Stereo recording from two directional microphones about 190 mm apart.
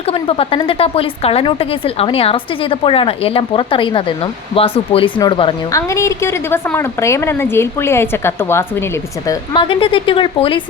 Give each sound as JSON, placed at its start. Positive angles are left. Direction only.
{"t": 0.1, "sound": "a woman's voice", "side_deg": 30}